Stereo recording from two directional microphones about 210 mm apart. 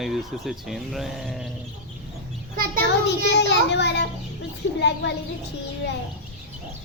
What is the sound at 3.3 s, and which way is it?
A child's voice, 55° left (ahead or behind).